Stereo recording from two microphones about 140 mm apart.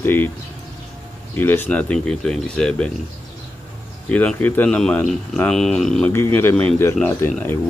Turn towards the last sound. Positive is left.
turn(degrees=15)  # may be behind; listen again after turning